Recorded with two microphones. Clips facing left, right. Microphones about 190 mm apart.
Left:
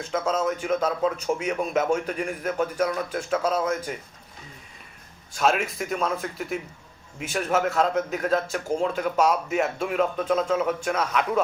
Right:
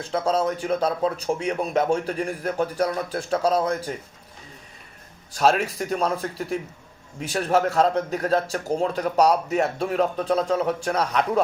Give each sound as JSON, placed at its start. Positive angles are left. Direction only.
{"t": 0.0, "sound": "a man's voice", "side_deg": -35}
{"t": 5.3, "sound": "a man's voice", "side_deg": -35}